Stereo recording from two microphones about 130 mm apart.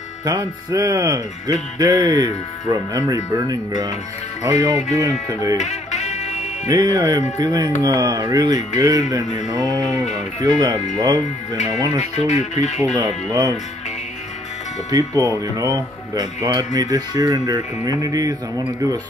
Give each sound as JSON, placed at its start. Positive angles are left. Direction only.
{"t": 0.2, "sound": "speech", "side_deg": -30}
{"t": 4.9, "sound": "speech", "side_deg": -30}
{"t": 5.6, "sound": "music", "side_deg": 60}
{"t": 6.7, "sound": "speech", "side_deg": -30}
{"t": 11.5, "sound": "speech", "side_deg": 65}
{"t": 12.9, "sound": "speech", "side_deg": -30}
{"t": 14.9, "sound": "speech", "side_deg": -30}